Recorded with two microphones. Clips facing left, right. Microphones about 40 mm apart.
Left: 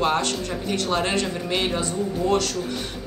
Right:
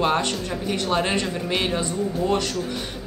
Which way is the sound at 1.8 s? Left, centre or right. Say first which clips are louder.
Even; centre.